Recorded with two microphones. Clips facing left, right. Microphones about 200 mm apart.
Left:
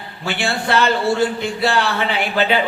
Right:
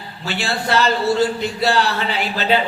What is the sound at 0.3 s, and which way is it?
A man's voice, 60° left (ahead or behind).